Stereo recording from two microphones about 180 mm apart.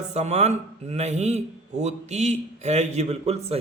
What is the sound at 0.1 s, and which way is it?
A man's voice, 40° right (ahead or behind).